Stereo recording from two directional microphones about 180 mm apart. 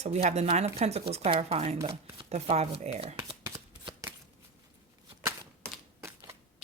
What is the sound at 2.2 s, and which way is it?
Speech, 35° right (ahead or behind).